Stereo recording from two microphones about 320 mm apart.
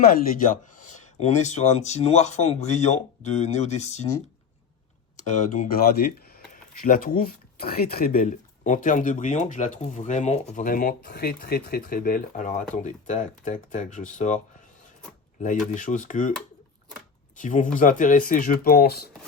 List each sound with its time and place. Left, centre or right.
0.0 s speech: left
5.1 s speech: left
15.7 s speech: left
17.3 s speech: left